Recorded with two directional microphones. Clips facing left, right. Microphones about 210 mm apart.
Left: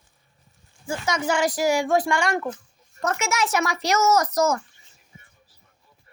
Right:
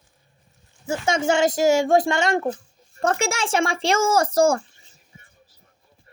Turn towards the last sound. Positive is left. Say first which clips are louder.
# right 3 dB
turn(degrees=-30)  # may be behind; listen again after turning